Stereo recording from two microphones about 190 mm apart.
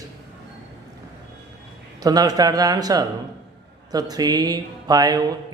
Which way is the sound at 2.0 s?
20° right (ahead or behind).